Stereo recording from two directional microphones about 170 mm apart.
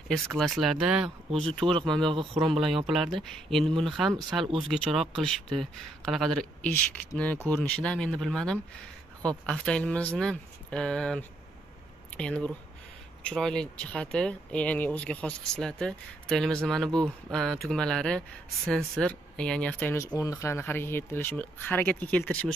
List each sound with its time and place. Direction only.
0.1 s speech: centre (ahead or behind)
2.0 s speech: 30° right (ahead or behind)
2.9 s speech: centre (ahead or behind)
5.1 s speech: centre (ahead or behind)